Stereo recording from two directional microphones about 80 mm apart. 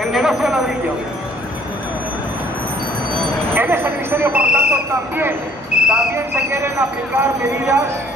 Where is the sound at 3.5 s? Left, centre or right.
Right.